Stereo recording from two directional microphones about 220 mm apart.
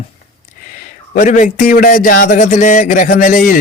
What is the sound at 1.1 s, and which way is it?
Speech, 35° left (ahead or behind).